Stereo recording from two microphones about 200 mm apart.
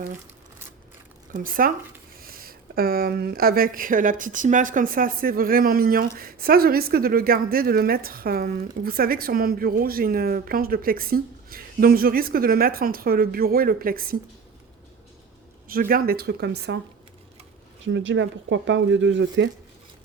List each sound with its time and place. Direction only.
1.3 s a woman's voice: 45° right (ahead or behind)
15.6 s a woman's voice: 45° right (ahead or behind)
17.8 s speech: 65° right (ahead or behind)